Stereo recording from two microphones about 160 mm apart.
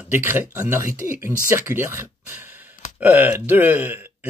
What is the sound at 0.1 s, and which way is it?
Speech, 15° right (ahead or behind).